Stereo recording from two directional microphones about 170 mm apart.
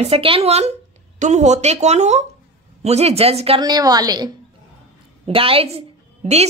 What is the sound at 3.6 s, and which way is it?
A woman's voice, 25° right (ahead or behind).